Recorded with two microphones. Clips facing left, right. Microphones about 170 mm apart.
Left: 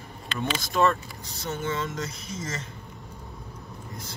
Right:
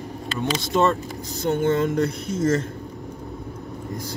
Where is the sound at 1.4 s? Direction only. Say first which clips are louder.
Right 10 dB; 60° right (ahead or behind).